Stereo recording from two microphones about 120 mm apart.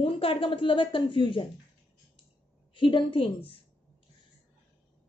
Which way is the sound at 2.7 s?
45° left (ahead or behind).